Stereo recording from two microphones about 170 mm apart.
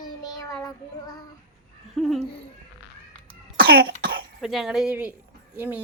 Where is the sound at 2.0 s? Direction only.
Centre (ahead or behind).